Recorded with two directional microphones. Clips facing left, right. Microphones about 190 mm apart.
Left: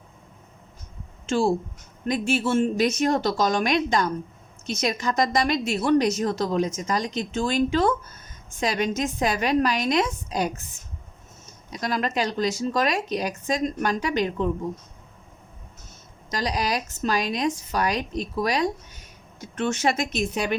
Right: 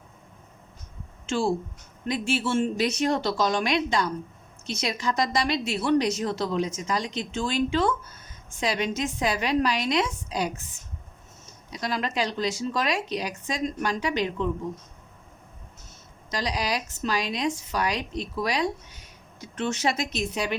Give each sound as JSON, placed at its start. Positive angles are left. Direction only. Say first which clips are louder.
{"t": 2.0, "sound": "a woman's voice", "louder": "left 3 dB", "side_deg": 45}
{"t": 11.7, "sound": "a woman's voice", "louder": "left 3 dB", "side_deg": 50}
{"t": 16.3, "sound": "a woman's voice", "louder": "left 2 dB", "side_deg": 45}